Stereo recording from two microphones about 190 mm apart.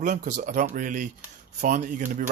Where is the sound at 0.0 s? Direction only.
40° right (ahead or behind).